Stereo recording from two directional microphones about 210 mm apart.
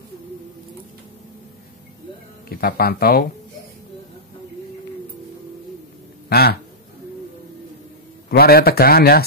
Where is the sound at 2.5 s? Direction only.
45° left (ahead or behind).